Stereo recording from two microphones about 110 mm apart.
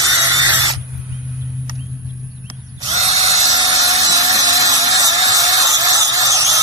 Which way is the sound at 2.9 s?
70° right (ahead or behind).